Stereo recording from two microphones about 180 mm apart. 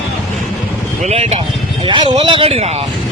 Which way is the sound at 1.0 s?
35° right (ahead or behind).